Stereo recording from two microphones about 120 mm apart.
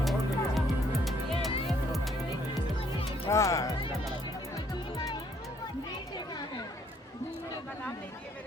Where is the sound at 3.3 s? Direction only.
25° left (ahead or behind).